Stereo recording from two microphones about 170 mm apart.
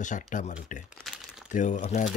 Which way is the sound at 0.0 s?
50° left (ahead or behind).